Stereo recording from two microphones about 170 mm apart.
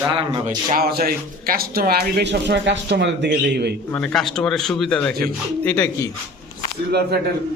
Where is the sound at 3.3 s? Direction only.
75° right (ahead or behind).